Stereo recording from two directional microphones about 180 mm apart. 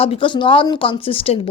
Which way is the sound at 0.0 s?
30° left (ahead or behind).